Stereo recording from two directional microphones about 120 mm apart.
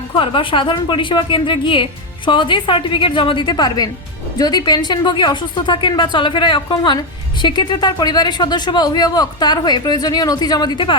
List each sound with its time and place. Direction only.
0.1 s a woman's voice: 45° left (ahead or behind)